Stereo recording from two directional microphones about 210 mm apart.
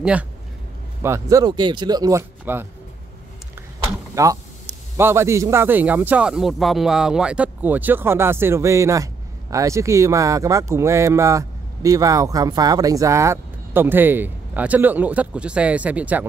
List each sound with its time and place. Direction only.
1.0 s a man's voice: 15° right (ahead or behind)
4.1 s a man's voice: 15° right (ahead or behind)